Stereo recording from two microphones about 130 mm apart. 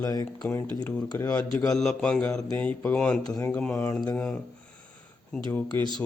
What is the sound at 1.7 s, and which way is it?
Speech, 5° left (ahead or behind).